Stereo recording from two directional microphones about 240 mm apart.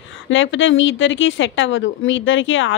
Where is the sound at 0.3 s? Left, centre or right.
Left.